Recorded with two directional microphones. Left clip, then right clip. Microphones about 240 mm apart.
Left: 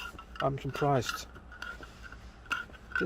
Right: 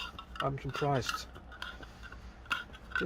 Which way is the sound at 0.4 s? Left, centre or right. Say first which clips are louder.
Left 4 dB; left.